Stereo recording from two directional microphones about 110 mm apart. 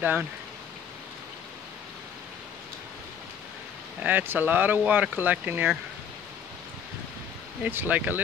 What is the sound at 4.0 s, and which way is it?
Speech, 20° right (ahead or behind).